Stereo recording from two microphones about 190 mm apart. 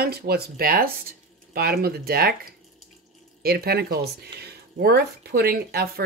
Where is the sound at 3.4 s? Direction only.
55° right (ahead or behind).